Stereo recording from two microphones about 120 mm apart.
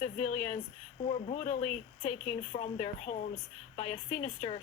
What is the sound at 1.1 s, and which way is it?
Speech, 70° left (ahead or behind).